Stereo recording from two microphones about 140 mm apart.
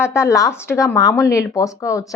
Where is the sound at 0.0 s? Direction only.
20° left (ahead or behind).